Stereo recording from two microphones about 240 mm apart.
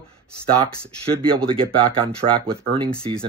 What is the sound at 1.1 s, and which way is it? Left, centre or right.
Speech, right.